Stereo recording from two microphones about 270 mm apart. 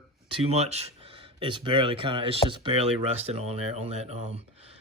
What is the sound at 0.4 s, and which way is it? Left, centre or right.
Speech, right.